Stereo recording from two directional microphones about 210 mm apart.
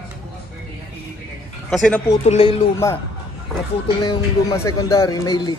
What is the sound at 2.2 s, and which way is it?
Speech, 30° left (ahead or behind).